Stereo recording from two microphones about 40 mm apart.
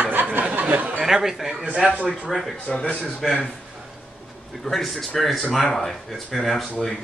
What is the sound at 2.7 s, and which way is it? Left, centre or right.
Speech, left.